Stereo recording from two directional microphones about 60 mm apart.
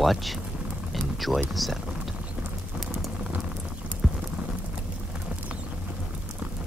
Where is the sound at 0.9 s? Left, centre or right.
Centre.